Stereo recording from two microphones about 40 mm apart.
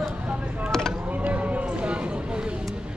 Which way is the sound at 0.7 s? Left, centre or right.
Centre.